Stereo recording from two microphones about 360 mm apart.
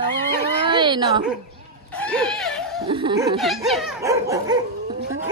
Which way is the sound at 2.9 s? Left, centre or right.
Centre.